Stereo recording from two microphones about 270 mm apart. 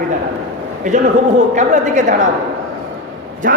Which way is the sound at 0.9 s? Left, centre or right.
Right.